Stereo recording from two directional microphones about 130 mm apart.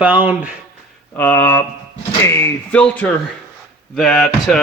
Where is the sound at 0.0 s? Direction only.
10° right (ahead or behind).